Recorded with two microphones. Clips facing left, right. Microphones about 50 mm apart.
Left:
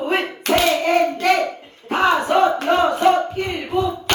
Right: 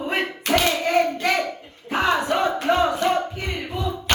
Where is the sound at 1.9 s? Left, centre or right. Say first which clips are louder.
Left 5 dB; left.